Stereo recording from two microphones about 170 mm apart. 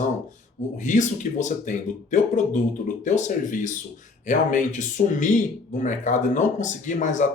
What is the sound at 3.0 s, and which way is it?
Speech, 45° left (ahead or behind).